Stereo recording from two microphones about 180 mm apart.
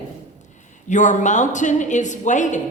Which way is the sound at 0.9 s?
45° left (ahead or behind).